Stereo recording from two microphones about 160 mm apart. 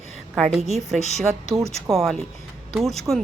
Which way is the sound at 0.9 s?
45° left (ahead or behind).